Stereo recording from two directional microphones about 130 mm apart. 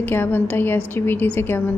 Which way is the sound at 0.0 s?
15° left (ahead or behind).